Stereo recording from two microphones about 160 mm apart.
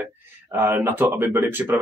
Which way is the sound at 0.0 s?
10° right (ahead or behind).